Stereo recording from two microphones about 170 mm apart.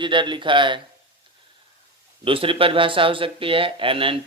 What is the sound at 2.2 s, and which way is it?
Speech, 30° right (ahead or behind).